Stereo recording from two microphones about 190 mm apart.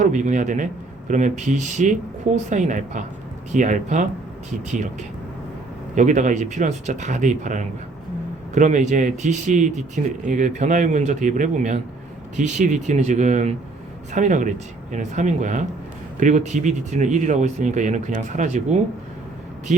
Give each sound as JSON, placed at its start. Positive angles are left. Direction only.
{"t": 0.0, "sound": "speech", "side_deg": -40}
{"t": 5.9, "sound": "speech", "side_deg": -40}